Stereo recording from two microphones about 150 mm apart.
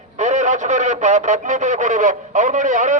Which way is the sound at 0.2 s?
55° right (ahead or behind).